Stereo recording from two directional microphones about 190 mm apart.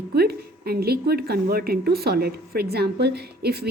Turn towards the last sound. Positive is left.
turn(degrees=-55)  # may be behind; listen again after turning